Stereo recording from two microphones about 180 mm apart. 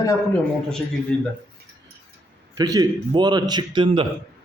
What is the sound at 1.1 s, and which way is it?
Speech, 5° left (ahead or behind).